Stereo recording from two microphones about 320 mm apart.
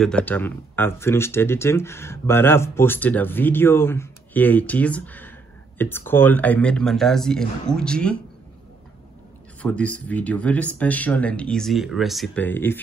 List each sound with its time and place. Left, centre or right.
0.0 s speech: centre
9.6 s speech: centre